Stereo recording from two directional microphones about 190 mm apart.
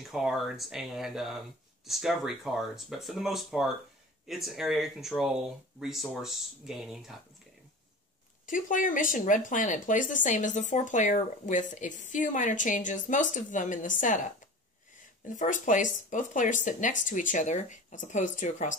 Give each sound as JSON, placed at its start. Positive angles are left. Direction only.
{"t": 0.0, "sound": "speech", "side_deg": 0}
{"t": 8.5, "sound": "speech", "side_deg": 45}
{"t": 15.2, "sound": "speech", "side_deg": 40}